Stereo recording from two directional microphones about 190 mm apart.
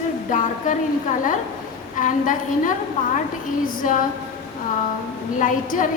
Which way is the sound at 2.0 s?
45° left (ahead or behind).